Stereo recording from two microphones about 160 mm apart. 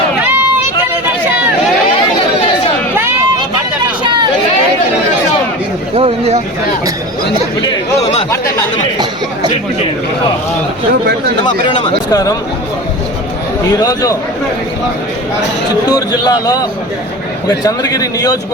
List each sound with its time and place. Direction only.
0.2 s run: 15° right (ahead or behind)
2.9 s a sound: 15° right (ahead or behind)
5.9 s a sound: 40° right (ahead or behind)
11.8 s a man's voice: 20° left (ahead or behind)
13.7 s a man's voice: 20° left (ahead or behind)
15.9 s a man's voice: 25° left (ahead or behind)